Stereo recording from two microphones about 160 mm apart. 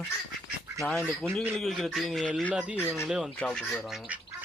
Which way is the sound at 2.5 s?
5° right (ahead or behind).